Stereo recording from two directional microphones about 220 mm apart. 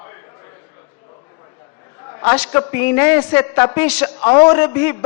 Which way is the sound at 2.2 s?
10° left (ahead or behind).